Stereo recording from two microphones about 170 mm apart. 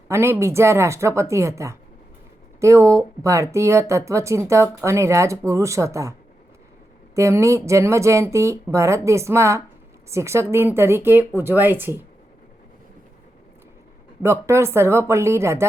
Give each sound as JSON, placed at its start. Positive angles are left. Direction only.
{"t": 0.1, "sound": "speech", "side_deg": -15}
{"t": 7.2, "sound": "speech", "side_deg": -15}
{"t": 14.2, "sound": "speech", "side_deg": -15}